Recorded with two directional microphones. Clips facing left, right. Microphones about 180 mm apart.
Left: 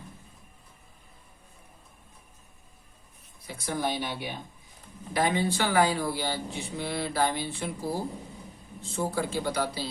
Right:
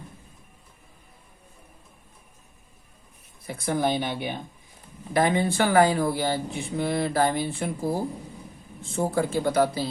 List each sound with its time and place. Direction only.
3.4 s speech: 55° right (ahead or behind)
8.8 s speech: 50° right (ahead or behind)